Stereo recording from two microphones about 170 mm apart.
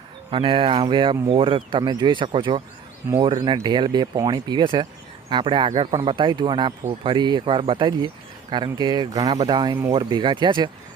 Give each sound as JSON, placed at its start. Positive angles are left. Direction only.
{"t": 0.3, "sound": "speech", "side_deg": -30}